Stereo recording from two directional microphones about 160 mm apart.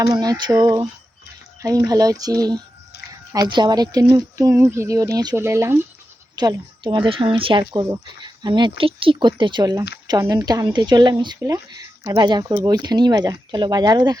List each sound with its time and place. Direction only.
0.0 s speech: 25° right (ahead or behind)
1.9 s a woman's voice: 25° right (ahead or behind)